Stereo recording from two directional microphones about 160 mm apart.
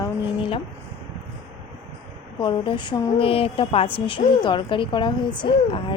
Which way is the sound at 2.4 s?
30° left (ahead or behind).